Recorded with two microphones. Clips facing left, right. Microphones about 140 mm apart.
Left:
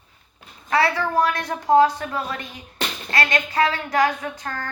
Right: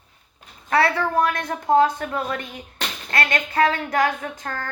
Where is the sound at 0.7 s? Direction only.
55° right (ahead or behind).